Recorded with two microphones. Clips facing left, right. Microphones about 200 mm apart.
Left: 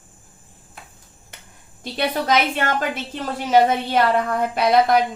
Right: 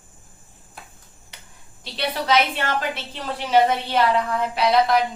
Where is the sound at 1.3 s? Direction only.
50° left (ahead or behind).